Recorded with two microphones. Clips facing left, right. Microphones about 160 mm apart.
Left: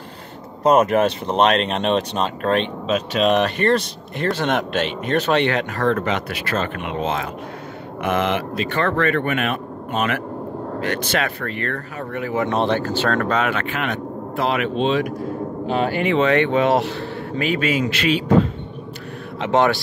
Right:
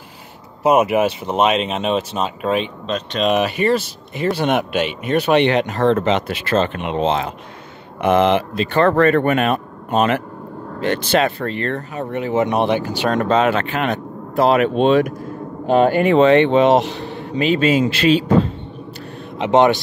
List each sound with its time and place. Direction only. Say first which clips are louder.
0.7 s speech: right 1 dB; 10° right (ahead or behind); by 16.3 s 45° right (ahead or behind)
16.3 s speech: right 5 dB; 25° right (ahead or behind)
19.4 s speech: right 4 dB; 20° right (ahead or behind)